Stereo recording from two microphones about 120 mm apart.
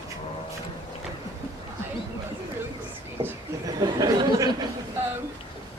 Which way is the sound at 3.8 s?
30° right (ahead or behind).